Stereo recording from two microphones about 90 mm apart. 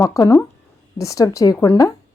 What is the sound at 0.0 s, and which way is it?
A woman's voice, 40° left (ahead or behind).